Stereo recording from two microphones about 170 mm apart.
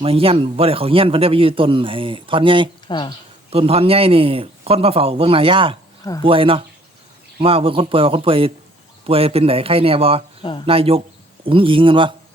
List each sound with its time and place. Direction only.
0.0 s a man's voice: 35° right (ahead or behind)
2.8 s speech: 25° left (ahead or behind)
3.5 s a man's voice: 35° right (ahead or behind)